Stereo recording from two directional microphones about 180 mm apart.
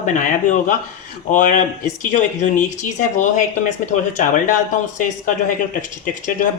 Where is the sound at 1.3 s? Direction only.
45° left (ahead or behind).